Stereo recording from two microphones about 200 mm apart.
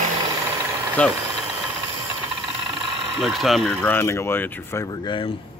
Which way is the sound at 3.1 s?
Centre (ahead or behind).